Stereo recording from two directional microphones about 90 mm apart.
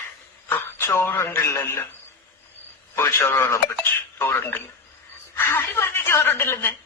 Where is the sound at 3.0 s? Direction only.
30° left (ahead or behind).